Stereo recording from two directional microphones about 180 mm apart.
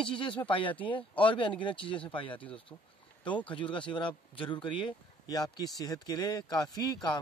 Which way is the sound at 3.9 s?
25° left (ahead or behind).